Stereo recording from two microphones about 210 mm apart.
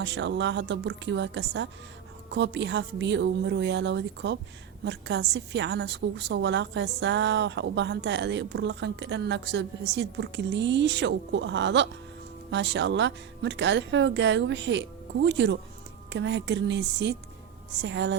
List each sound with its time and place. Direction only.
0.0 s a woman's voice: 55° right (ahead or behind)